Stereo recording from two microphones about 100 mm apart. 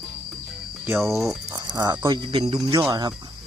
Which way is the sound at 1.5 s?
40° right (ahead or behind).